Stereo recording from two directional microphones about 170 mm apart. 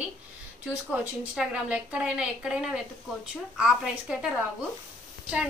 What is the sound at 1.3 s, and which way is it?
A woman's voice, 5° right (ahead or behind).